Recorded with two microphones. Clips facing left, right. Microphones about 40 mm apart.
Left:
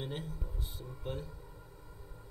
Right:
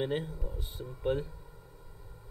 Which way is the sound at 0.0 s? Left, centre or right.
Right.